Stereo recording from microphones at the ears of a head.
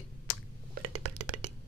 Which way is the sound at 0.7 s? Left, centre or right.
Right.